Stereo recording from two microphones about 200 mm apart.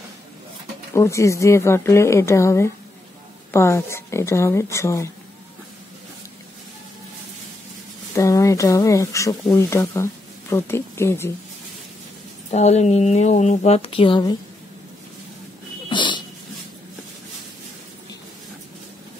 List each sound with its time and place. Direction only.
0.9 s speech: 15° left (ahead or behind)
8.1 s speech: 15° left (ahead or behind)
12.4 s speech: 35° left (ahead or behind)
15.9 s dog: 25° left (ahead or behind)